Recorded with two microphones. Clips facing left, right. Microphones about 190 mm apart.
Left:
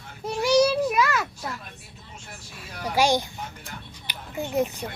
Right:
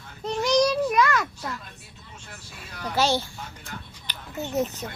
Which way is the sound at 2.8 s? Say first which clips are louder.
Left 2 dB; 15° left (ahead or behind).